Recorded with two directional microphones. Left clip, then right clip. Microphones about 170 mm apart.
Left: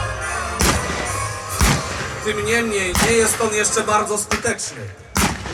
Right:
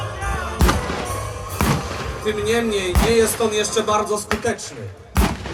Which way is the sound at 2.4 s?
Centre (ahead or behind).